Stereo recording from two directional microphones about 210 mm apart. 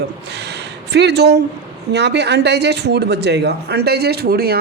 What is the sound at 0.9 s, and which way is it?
A man's voice, 50° right (ahead or behind).